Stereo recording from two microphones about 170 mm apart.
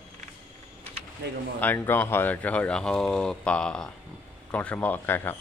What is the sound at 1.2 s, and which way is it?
Speech, 75° right (ahead or behind).